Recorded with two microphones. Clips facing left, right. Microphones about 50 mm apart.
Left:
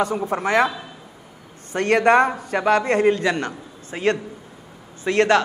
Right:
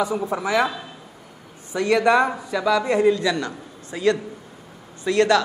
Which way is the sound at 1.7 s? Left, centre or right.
Left.